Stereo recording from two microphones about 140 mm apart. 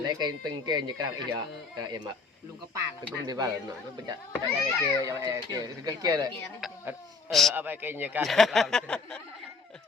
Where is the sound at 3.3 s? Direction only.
30° right (ahead or behind).